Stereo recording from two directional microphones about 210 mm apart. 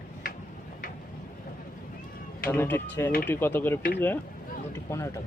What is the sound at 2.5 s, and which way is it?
Speech, 10° left (ahead or behind).